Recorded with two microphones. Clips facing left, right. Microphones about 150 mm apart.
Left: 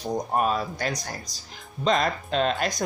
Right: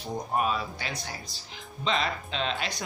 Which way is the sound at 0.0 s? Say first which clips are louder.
Left 4 dB; 40° left (ahead or behind).